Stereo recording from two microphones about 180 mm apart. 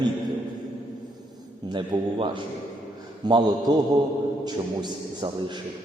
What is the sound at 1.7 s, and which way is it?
A man's voice, 25° right (ahead or behind).